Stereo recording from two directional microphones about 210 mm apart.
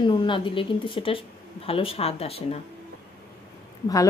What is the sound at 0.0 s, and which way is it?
A woman's voice, 20° left (ahead or behind).